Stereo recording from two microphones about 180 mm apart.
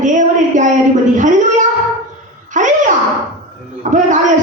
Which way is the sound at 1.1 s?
45° right (ahead or behind).